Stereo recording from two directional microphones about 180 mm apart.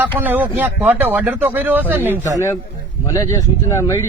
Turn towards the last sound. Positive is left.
turn(degrees=15)  # may be behind; listen again after turning